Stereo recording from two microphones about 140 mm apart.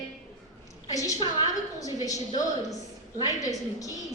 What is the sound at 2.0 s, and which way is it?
A woman's voice, 25° left (ahead or behind).